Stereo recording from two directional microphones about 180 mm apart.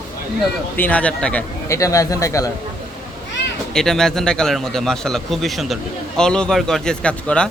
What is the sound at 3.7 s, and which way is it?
A man's voice, 5° left (ahead or behind).